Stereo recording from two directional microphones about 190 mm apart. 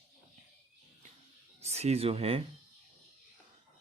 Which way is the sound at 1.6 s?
35° right (ahead or behind).